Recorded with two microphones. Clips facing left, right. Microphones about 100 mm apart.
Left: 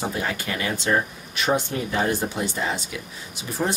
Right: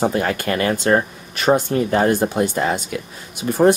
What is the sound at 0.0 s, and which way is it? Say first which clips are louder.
Speech: right 8 dB; 55° right (ahead or behind).